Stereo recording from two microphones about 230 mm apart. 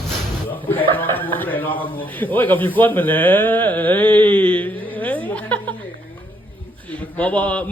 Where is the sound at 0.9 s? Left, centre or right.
Centre.